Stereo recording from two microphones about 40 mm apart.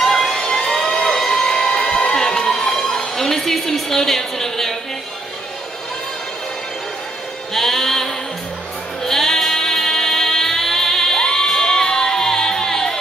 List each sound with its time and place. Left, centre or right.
0.0 s fire engine: centre
0.4 s a sound: centre
2.7 s a woman's voice: centre
7.5 s music: centre